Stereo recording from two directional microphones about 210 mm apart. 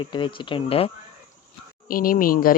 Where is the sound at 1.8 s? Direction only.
40° left (ahead or behind).